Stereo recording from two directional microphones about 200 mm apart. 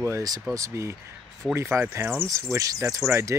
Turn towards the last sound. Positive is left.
turn(degrees=-15)  # may be behind; listen again after turning